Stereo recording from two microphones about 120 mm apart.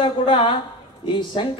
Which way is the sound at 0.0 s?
45° left (ahead or behind).